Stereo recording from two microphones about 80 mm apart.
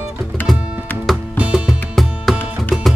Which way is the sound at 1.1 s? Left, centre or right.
Centre.